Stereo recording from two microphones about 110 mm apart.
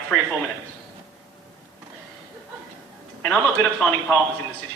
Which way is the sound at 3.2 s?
10° left (ahead or behind).